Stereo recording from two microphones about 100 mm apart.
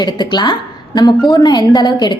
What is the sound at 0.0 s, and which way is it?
A woman's voice, 45° left (ahead or behind).